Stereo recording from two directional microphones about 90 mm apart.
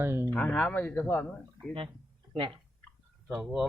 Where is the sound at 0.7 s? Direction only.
30° left (ahead or behind).